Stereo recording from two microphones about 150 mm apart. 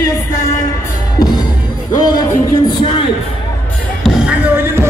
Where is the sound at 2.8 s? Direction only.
35° left (ahead or behind).